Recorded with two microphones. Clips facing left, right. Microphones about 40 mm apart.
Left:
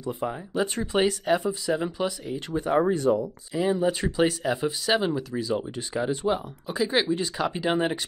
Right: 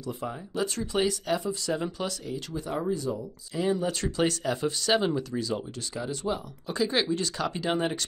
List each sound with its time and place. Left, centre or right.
0.0 s speech: left
2.5 s speech: left
3.5 s speech: centre
6.7 s speech: centre